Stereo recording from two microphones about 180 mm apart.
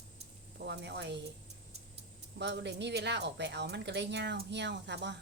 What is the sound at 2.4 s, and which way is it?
A woman's voice, 70° right (ahead or behind).